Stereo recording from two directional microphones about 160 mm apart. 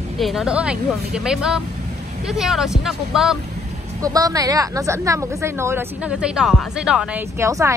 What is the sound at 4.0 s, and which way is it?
Speech, 20° right (ahead or behind).